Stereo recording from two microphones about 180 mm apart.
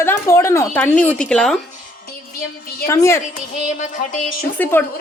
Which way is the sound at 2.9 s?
15° left (ahead or behind).